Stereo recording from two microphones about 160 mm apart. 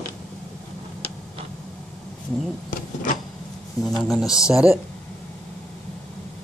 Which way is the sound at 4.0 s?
Centre (ahead or behind).